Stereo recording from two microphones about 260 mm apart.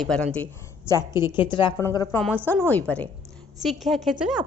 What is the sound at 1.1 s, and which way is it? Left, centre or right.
Speech, centre.